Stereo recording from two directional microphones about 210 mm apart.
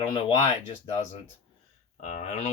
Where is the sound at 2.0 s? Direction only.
35° left (ahead or behind).